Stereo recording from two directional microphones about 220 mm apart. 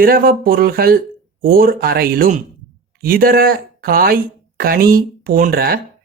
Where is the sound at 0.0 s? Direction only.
40° right (ahead or behind).